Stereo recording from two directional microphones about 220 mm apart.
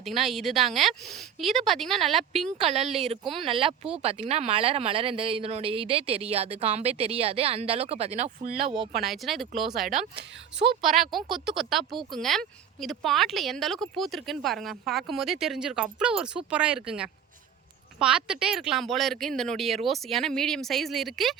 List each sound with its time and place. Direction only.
0.0 s speech: centre (ahead or behind)
2.6 s speech: 30° right (ahead or behind)
9.0 s speech: centre (ahead or behind)
10.2 s speech: 50° right (ahead or behind)
10.8 s speech: centre (ahead or behind)